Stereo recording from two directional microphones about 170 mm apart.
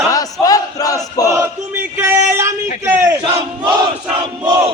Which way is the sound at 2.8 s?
15° right (ahead or behind).